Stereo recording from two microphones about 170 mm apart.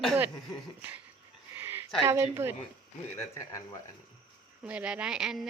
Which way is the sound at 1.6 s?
10° right (ahead or behind).